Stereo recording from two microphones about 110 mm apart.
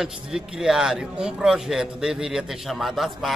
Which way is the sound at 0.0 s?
5° right (ahead or behind).